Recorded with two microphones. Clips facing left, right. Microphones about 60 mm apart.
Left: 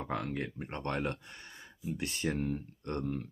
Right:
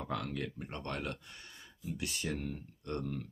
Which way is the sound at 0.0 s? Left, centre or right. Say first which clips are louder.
Left 2 dB; left.